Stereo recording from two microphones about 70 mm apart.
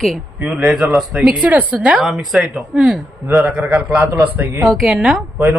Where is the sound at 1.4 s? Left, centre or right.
Right.